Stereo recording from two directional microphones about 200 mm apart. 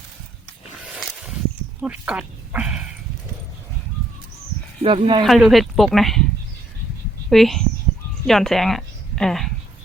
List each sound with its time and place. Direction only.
0.9 s a sound: 5° right (ahead or behind)
1.8 s speech: 5° right (ahead or behind)
4.8 s speech: 25° right (ahead or behind)
5.2 s speech: centre (ahead or behind)
7.3 s speech: centre (ahead or behind)